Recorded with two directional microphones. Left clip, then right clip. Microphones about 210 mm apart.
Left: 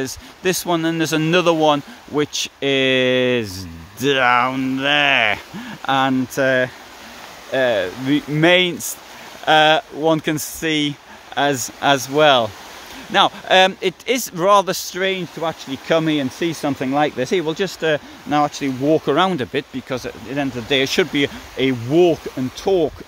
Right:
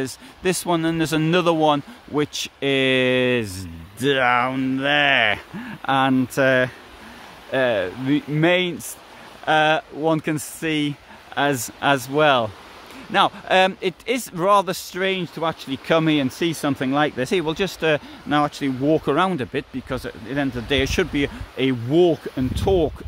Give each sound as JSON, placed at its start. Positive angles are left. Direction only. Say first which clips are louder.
{"t": 0.0, "sound": "speech", "louder": "left 2 dB", "side_deg": -5}